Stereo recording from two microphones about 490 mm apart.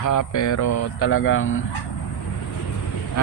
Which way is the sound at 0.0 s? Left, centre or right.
Left.